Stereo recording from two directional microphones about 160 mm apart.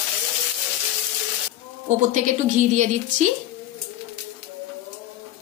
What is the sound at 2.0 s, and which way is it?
A woman's voice, 50° right (ahead or behind).